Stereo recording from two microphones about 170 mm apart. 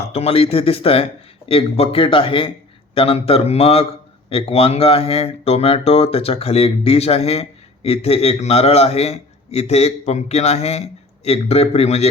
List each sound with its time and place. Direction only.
0.1 s a man's voice: 35° left (ahead or behind)